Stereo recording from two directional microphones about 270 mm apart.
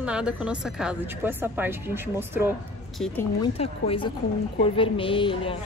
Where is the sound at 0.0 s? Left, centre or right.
Centre.